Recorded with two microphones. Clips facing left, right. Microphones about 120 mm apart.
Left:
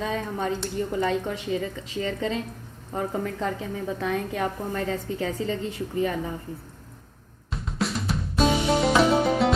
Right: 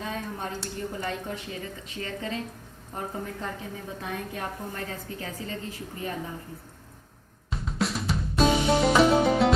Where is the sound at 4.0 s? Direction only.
90° left.